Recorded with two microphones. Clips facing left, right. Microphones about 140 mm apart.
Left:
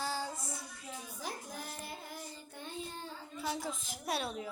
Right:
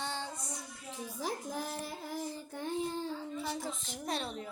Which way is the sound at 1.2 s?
90° right.